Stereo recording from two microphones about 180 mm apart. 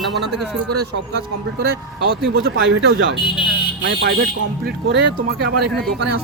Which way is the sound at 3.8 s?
65° right (ahead or behind).